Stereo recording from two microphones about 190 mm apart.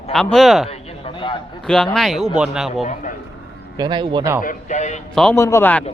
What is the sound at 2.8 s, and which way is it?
Speech, 40° left (ahead or behind).